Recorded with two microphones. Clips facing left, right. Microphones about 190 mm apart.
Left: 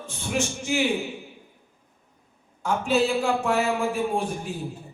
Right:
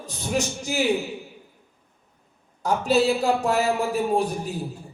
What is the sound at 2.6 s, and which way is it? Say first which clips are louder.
Speech: right 2 dB; 40° right (ahead or behind).